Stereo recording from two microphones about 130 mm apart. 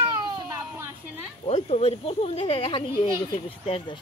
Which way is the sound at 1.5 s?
55° left (ahead or behind).